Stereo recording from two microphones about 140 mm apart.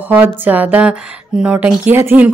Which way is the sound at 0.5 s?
10° right (ahead or behind).